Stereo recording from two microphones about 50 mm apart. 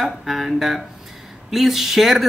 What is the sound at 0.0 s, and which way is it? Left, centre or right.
Speech, centre.